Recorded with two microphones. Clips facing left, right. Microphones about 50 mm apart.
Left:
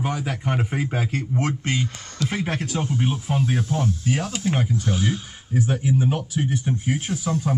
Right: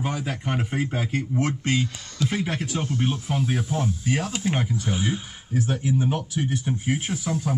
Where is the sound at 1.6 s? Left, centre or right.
Left.